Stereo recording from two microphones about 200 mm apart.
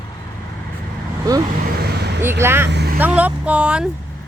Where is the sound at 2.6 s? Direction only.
55° right (ahead or behind).